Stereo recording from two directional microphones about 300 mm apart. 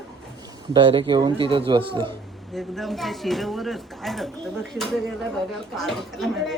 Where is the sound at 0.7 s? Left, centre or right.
Centre.